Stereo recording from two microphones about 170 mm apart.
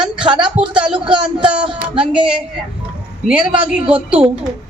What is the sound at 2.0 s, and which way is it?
A woman's voice, 5° right (ahead or behind).